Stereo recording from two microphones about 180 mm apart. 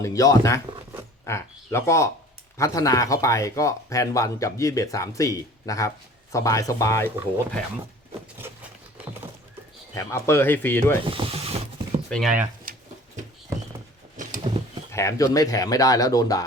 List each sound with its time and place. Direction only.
0.0 s speech: 20° left (ahead or behind)
9.9 s speech: 15° left (ahead or behind)
11.0 s speech: 30° right (ahead or behind)
12.0 s speech: 5° left (ahead or behind)
12.7 s a sound: 50° right (ahead or behind)
14.5 s a sound: 30° right (ahead or behind)
14.9 s speech: 15° left (ahead or behind)